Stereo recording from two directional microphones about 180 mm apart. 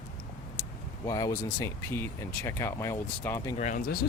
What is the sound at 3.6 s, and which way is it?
Speech, 45° left (ahead or behind).